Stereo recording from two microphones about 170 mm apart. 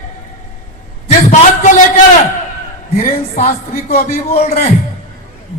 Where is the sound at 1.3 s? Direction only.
45° left (ahead or behind).